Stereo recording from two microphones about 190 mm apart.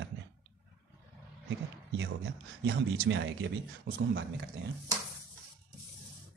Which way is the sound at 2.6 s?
75° right (ahead or behind).